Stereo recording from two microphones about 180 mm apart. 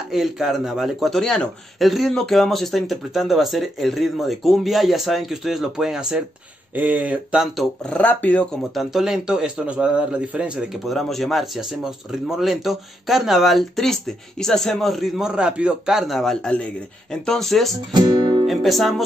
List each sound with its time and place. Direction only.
0.1 s speech: centre (ahead or behind)
17.9 s music: 25° right (ahead or behind)
18.5 s speech: centre (ahead or behind)